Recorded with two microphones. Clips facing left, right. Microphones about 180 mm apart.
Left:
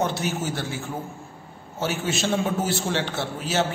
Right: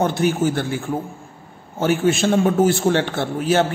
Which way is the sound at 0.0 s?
50° right (ahead or behind).